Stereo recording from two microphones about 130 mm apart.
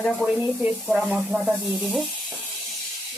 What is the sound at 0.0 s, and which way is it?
Speech, 5° left (ahead or behind).